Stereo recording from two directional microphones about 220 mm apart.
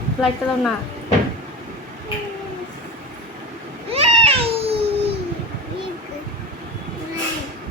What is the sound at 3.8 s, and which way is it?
Babbling, 25° right (ahead or behind).